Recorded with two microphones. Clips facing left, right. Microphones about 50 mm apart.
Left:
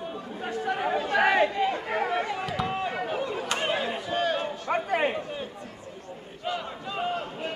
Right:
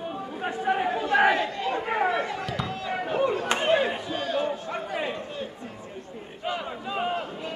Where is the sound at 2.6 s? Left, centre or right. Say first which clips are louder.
Left 3 dB; left.